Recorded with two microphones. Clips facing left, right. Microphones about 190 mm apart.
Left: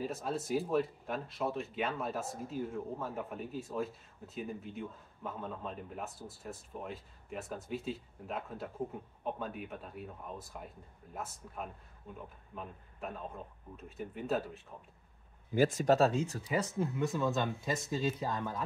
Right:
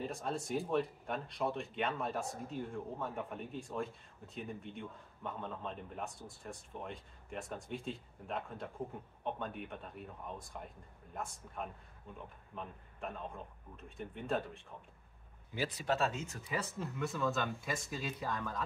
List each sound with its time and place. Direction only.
0.0 s a man's voice: 5° left (ahead or behind)
15.5 s speech: 45° left (ahead or behind)
16.4 s speech: 15° left (ahead or behind)